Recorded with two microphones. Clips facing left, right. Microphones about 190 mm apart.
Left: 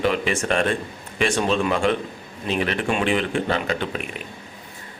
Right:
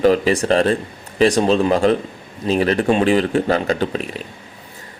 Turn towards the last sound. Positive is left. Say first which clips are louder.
# right 6 dB
turn(degrees=-35)  # may be behind; listen again after turning